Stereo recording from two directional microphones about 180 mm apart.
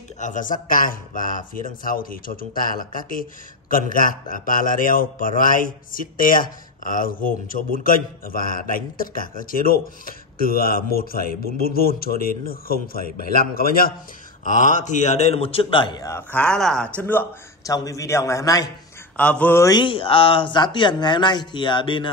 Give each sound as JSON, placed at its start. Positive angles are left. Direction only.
{"t": 0.2, "sound": "a man's voice", "side_deg": 45}
{"t": 14.4, "sound": "a man's voice", "side_deg": 45}
{"t": 19.1, "sound": "a man's voice", "side_deg": 5}